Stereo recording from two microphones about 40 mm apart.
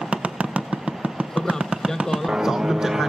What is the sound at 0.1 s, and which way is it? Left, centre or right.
Vehicle, right.